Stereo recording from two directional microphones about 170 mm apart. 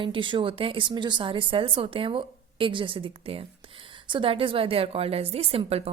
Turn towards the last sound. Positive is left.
turn(degrees=-35)  # may be behind; listen again after turning